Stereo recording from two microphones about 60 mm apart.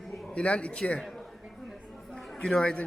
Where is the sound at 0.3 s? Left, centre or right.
Centre.